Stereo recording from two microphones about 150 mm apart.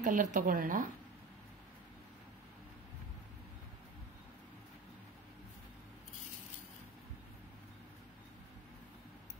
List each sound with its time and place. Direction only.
0.0 s a woman's voice: 60° right (ahead or behind)